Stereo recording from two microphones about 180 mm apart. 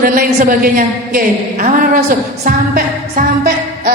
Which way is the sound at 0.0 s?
50° right (ahead or behind).